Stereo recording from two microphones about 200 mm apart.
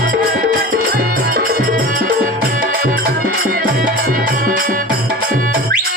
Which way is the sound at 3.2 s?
45° right (ahead or behind).